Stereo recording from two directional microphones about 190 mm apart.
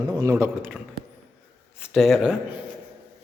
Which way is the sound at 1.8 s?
Centre (ahead or behind).